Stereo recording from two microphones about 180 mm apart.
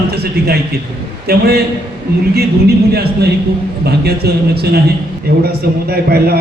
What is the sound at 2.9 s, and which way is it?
A man's voice, 60° right (ahead or behind).